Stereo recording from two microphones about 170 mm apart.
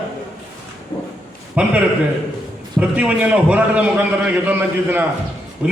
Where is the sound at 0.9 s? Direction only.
25° left (ahead or behind).